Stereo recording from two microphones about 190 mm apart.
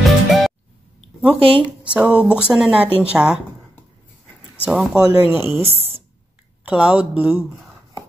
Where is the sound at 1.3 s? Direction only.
30° right (ahead or behind).